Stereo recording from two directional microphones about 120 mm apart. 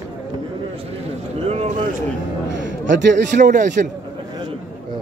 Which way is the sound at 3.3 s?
90° right.